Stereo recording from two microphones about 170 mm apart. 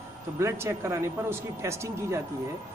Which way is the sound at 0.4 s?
15° right (ahead or behind).